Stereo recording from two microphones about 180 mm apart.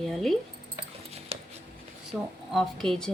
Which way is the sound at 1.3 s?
35° right (ahead or behind).